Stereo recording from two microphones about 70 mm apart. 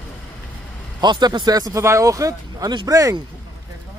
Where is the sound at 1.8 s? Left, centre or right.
Right.